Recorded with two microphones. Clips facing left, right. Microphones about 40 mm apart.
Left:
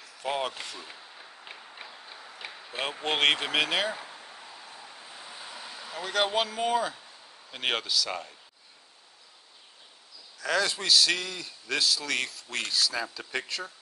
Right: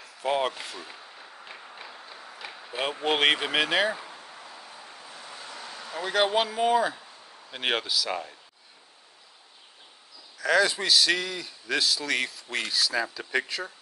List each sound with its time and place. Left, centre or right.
0.0 s speech: centre
2.4 s speech: centre
5.1 s a sound: centre
7.5 s speech: centre
10.4 s a man's voice: centre